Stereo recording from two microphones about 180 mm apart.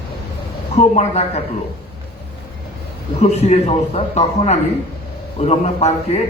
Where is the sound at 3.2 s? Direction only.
40° left (ahead or behind).